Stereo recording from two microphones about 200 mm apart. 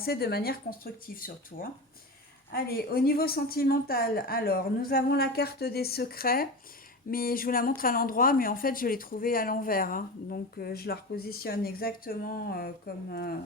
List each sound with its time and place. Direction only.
0.0 s speech: 50° left (ahead or behind)
2.5 s speech: 50° left (ahead or behind)